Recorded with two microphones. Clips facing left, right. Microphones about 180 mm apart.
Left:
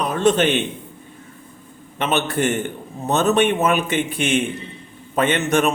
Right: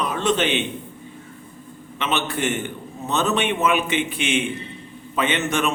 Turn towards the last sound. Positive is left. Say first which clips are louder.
# left 4 dB
turn(degrees=45)  # may be behind; listen again after turning